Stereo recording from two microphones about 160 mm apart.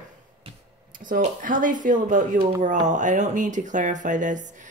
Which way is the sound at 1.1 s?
55° right (ahead or behind).